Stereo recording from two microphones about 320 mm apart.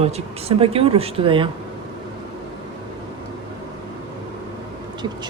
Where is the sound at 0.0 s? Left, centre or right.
Centre.